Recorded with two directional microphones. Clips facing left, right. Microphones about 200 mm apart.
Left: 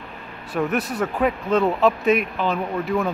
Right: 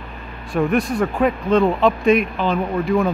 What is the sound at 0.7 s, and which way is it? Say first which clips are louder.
Speech: right 7 dB; 5° left (ahead or behind).